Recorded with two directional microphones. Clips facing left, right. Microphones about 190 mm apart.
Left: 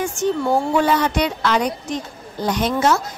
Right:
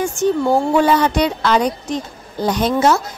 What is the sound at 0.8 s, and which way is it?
A woman's voice, 30° right (ahead or behind).